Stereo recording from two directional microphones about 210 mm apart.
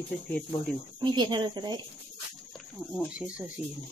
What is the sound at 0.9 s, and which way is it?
Speech, 20° right (ahead or behind).